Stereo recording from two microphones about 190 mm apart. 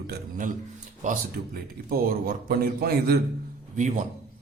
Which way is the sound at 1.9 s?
50° right (ahead or behind).